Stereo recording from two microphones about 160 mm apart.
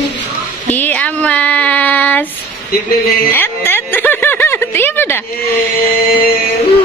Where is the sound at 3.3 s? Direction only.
15° left (ahead or behind).